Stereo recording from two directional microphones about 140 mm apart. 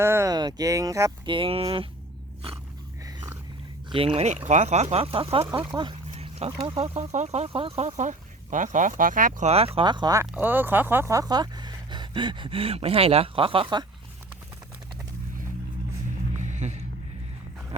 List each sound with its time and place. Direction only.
0.0 s speech: 20° right (ahead or behind)
1.3 s speech: 40° right (ahead or behind)
3.9 s speech: 40° right (ahead or behind)
6.1 s wild animals: 45° right (ahead or behind)
6.7 s speech: 45° right (ahead or behind)
7.9 s speech: 60° right (ahead or behind)
9.5 s speech: 45° right (ahead or behind)
10.3 s speech: 15° right (ahead or behind); by 13.8 s 35° right (ahead or behind)
16.4 s a sound: 55° right (ahead or behind)